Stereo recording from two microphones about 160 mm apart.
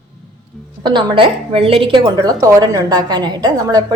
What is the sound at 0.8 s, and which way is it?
A woman's voice, 30° right (ahead or behind).